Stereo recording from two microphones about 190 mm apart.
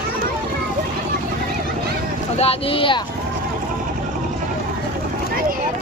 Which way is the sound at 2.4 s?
30° left (ahead or behind).